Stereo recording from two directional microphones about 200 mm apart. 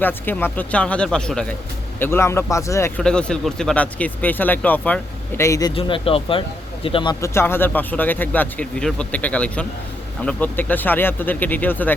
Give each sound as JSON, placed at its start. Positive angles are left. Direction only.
{"t": 0.0, "sound": "speech", "side_deg": 10}
{"t": 3.0, "sound": "speech", "side_deg": 5}